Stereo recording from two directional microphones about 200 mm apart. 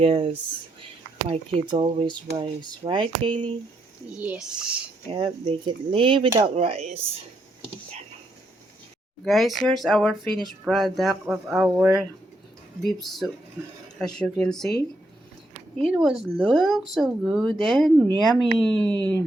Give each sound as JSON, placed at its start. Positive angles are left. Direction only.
{"t": 0.0, "sound": "speech", "side_deg": -30}
{"t": 4.1, "sound": "speech", "side_deg": -5}
{"t": 5.1, "sound": "speech", "side_deg": -25}
{"t": 9.2, "sound": "speech", "side_deg": 0}
{"t": 15.9, "sound": "speech", "side_deg": 0}